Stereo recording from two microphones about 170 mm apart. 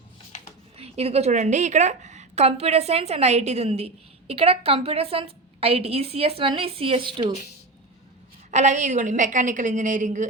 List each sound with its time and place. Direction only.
0.8 s a woman's voice: 35° right (ahead or behind)
8.4 s a woman's voice: 45° right (ahead or behind)